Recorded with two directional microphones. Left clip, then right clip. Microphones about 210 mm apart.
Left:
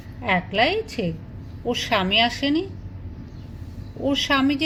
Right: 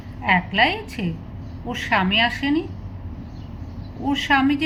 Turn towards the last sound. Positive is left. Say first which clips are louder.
# right 2 dB
turn(degrees=35)  # may be behind; listen again after turning